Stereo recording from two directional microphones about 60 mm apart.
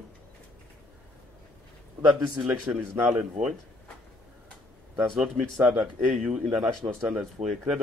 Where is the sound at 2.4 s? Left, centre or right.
Centre.